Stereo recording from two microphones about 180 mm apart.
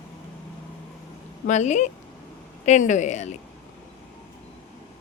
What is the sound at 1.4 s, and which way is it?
Speech, 40° left (ahead or behind).